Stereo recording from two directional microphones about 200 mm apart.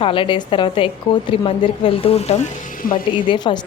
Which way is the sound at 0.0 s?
25° left (ahead or behind).